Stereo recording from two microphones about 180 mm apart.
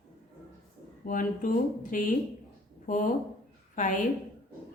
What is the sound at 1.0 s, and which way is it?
A woman's voice, 50° left (ahead or behind).